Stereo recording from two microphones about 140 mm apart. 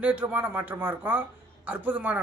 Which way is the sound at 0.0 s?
10° right (ahead or behind).